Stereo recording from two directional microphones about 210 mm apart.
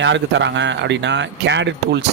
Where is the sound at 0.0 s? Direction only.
60° right (ahead or behind).